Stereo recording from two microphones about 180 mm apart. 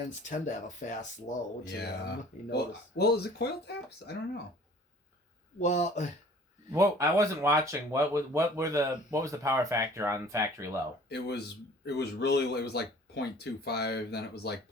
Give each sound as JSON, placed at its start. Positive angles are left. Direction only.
{"t": 0.3, "sound": "speech", "side_deg": 45}
{"t": 1.7, "sound": "speech", "side_deg": 65}
{"t": 5.5, "sound": "speech", "side_deg": 40}
{"t": 6.7, "sound": "speech", "side_deg": -15}
{"t": 11.1, "sound": "speech", "side_deg": 70}